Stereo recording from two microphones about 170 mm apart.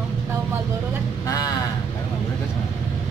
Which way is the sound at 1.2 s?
20° left (ahead or behind).